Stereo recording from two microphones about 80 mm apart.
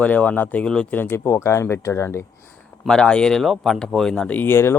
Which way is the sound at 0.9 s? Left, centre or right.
Left.